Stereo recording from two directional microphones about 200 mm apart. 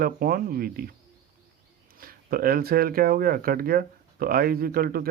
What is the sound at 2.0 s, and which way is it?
Speech, 45° right (ahead or behind).